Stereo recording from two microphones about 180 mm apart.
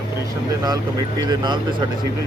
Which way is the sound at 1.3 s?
25° right (ahead or behind).